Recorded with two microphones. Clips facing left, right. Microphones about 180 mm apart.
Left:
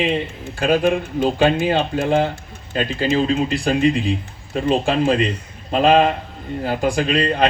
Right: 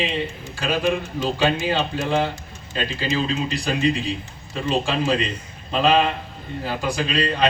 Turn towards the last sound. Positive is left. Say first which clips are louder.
# left 4 dB
turn(degrees=50)  # may be behind; listen again after turning